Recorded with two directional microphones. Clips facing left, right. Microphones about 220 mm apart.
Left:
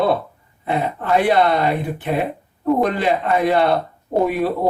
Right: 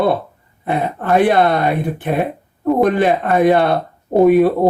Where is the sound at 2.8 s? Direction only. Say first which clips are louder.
Right 4 dB; 55° right (ahead or behind).